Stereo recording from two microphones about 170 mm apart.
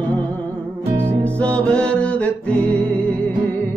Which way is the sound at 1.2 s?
5° left (ahead or behind).